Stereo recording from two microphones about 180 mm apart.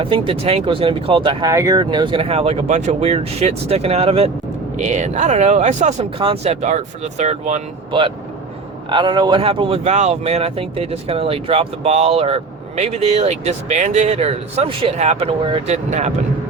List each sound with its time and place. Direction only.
0.0 s speech: 30° right (ahead or behind)